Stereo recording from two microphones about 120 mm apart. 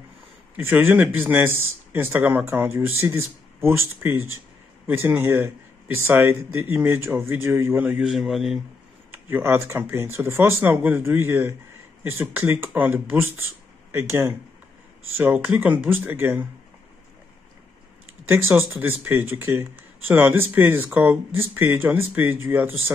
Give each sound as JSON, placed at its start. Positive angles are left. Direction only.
{"t": 0.6, "sound": "speech", "side_deg": -15}
{"t": 8.1, "sound": "speech", "side_deg": 0}
{"t": 9.1, "sound": "speech", "side_deg": -20}
{"t": 18.3, "sound": "speech", "side_deg": -15}